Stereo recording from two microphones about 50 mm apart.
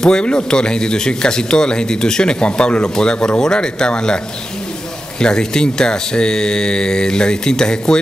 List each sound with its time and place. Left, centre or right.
0.0 s speech: centre
5.2 s speech: centre